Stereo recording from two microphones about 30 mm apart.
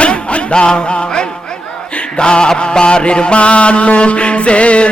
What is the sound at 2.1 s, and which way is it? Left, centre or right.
Mantra, left.